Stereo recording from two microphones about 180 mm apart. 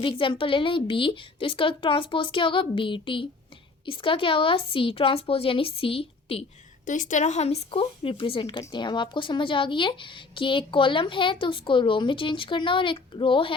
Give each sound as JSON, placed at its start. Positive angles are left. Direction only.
{"t": 0.0, "sound": "speech", "side_deg": 30}
{"t": 6.8, "sound": "speech", "side_deg": 45}